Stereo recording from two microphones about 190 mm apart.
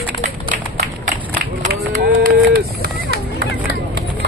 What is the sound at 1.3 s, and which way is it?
Run, 45° right (ahead or behind).